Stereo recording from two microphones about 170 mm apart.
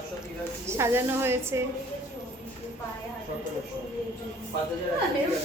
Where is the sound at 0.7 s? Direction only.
15° right (ahead or behind).